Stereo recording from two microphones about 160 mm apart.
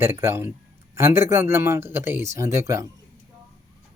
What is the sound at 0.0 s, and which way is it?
Speech, 15° right (ahead or behind).